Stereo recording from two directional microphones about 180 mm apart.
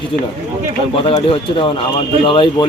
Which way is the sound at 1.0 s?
30° left (ahead or behind).